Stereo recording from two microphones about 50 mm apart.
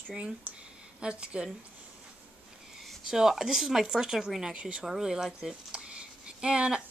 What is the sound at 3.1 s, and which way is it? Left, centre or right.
Speech, centre.